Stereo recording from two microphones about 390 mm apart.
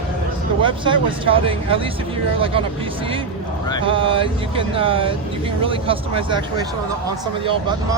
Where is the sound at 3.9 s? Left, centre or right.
Centre.